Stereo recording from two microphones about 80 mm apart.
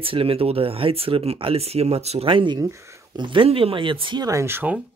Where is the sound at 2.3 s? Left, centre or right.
Right.